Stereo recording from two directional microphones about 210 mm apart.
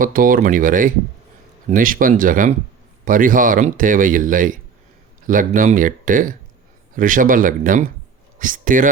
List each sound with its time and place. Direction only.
0.0 s speech: 40° right (ahead or behind)